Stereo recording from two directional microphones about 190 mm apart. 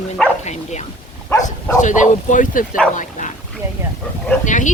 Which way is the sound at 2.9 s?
40° left (ahead or behind).